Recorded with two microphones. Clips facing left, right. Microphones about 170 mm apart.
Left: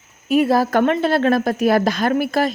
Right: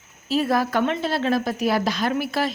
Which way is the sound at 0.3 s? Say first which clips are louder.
Left 5 dB; 30° left (ahead or behind).